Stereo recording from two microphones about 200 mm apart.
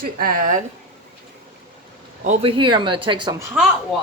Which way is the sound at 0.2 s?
45° right (ahead or behind).